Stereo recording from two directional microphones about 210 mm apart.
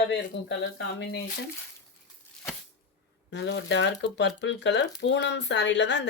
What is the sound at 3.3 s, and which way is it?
Speech, 55° left (ahead or behind).